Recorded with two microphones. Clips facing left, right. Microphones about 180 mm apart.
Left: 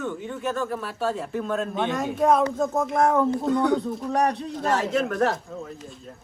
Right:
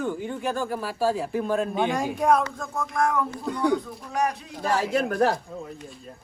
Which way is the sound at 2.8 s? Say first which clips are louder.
Left 3 dB; 25° left (ahead or behind).